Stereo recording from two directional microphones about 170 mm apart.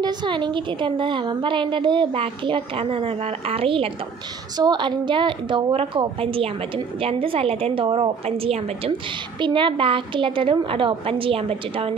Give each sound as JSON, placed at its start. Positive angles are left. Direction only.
{"t": 0.0, "sound": "a woman's voice", "side_deg": -25}